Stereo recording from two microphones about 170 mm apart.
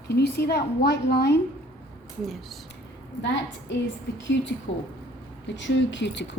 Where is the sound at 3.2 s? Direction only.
90° left.